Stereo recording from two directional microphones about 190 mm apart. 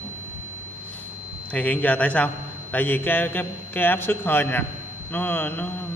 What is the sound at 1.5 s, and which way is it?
A man's voice, 5° left (ahead or behind).